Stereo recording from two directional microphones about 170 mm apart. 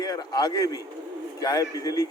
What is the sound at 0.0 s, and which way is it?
A man's voice, 25° left (ahead or behind).